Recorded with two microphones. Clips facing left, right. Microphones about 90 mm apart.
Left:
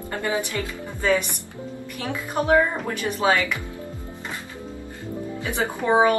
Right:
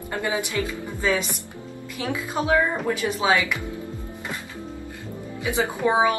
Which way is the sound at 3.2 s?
15° right (ahead or behind).